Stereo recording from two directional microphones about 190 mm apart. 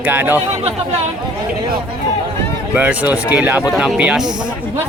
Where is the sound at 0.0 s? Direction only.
10° right (ahead or behind).